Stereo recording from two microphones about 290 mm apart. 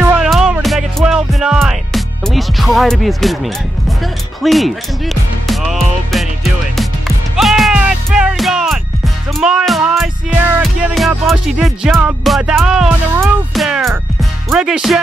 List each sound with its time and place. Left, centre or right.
0.0 s music: centre
4.4 s music: centre